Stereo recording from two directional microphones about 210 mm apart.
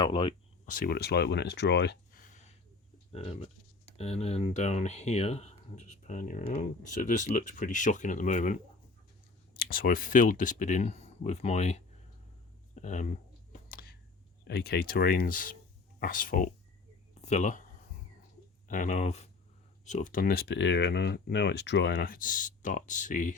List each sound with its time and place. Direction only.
0.0 s speech: 25° left (ahead or behind)
0.6 s speech: 40° left (ahead or behind)
3.1 s speech: 25° left (ahead or behind)
12.7 s a sound: 35° left (ahead or behind)
14.4 s speech: 50° left (ahead or behind)
18.7 s speech: 35° left (ahead or behind)